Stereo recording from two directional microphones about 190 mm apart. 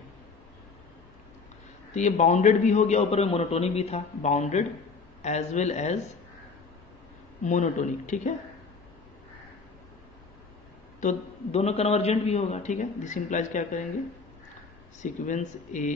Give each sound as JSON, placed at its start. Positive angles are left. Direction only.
{"t": 2.0, "sound": "a man's voice", "side_deg": 40}
{"t": 7.4, "sound": "a man's voice", "side_deg": 40}
{"t": 11.0, "sound": "a man's voice", "side_deg": 35}
{"t": 15.0, "sound": "a man's voice", "side_deg": 40}